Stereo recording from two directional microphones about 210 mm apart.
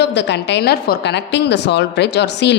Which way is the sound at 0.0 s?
55° left (ahead or behind).